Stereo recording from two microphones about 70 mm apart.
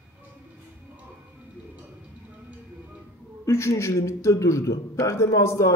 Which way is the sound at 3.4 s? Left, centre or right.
Left.